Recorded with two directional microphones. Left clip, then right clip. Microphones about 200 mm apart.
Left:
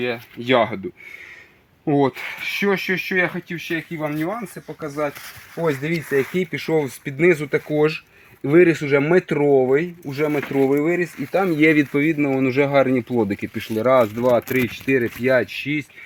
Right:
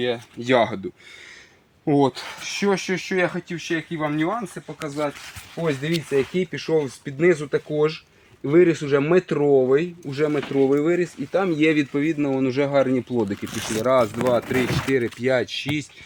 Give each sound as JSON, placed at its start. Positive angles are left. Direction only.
{"t": 0.0, "sound": "speech", "side_deg": 5}
{"t": 1.8, "sound": "speech", "side_deg": 5}
{"t": 11.3, "sound": "speech", "side_deg": 20}
{"t": 13.8, "sound": "speech", "side_deg": 35}